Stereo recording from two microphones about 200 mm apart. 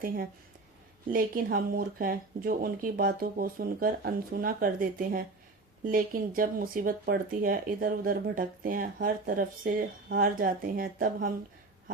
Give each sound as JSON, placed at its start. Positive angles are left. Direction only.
{"t": 1.1, "sound": "speech", "side_deg": -45}